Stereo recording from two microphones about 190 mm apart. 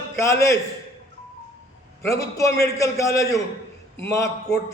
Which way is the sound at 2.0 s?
15° left (ahead or behind).